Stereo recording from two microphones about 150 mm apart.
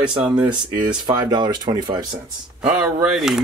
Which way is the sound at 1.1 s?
30° right (ahead or behind).